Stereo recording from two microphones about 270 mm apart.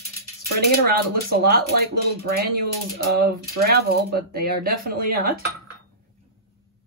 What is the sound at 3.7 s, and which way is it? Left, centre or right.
Speech, right.